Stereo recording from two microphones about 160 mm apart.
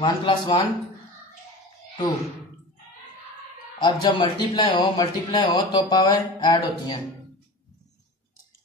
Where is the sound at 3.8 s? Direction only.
30° left (ahead or behind).